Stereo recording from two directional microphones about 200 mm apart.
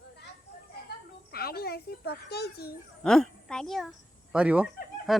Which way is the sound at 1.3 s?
50° left (ahead or behind).